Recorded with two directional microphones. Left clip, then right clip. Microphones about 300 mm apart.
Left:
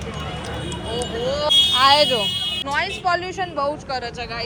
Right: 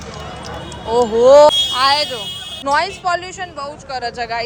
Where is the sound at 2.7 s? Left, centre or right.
Centre.